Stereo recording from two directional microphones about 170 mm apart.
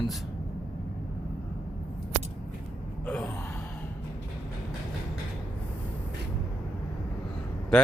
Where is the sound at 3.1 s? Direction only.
5° left (ahead or behind).